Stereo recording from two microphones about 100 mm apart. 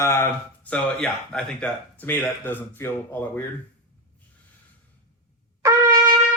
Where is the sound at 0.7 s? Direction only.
10° left (ahead or behind).